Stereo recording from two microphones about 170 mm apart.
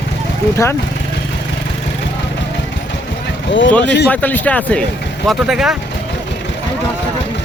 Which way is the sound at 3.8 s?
90° left.